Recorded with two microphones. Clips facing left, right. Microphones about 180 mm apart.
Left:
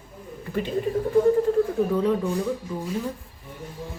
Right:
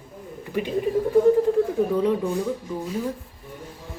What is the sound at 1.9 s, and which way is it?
Speech, 15° right (ahead or behind).